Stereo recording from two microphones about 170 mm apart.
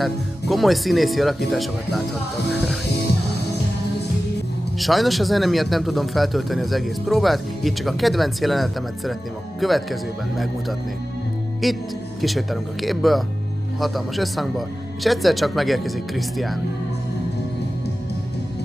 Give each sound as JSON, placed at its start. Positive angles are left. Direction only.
{"t": 0.0, "sound": "a man's voice", "side_deg": 0}
{"t": 4.7, "sound": "a man's voice", "side_deg": 0}
{"t": 11.6, "sound": "a man's voice", "side_deg": 0}